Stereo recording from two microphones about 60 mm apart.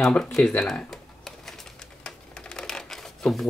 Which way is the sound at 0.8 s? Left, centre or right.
Centre.